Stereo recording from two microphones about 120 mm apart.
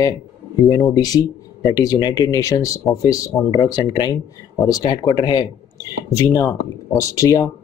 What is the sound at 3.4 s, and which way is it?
Speech, 40° left (ahead or behind).